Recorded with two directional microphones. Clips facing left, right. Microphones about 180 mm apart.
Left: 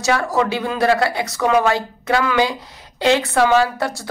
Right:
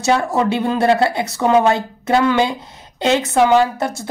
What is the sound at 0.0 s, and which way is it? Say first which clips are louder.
Speech: right 2 dB; 25° right (ahead or behind).